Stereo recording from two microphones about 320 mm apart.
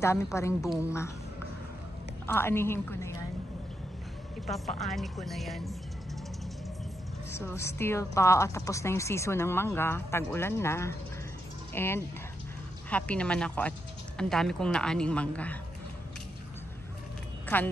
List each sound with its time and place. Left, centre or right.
0.0 s a woman's voice: centre
2.2 s a woman's voice: centre
4.5 s speech: centre
7.2 s a woman's voice: centre